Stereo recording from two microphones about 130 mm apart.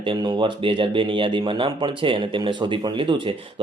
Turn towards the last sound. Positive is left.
turn(degrees=-40)  # may be behind; listen again after turning